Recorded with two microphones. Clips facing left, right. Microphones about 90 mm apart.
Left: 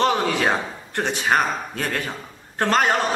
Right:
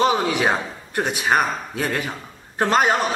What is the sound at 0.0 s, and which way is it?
A man's voice, 10° right (ahead or behind).